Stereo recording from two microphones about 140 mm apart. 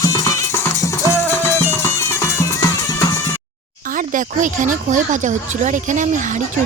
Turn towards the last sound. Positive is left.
turn(degrees=-65)  # may be behind; listen again after turning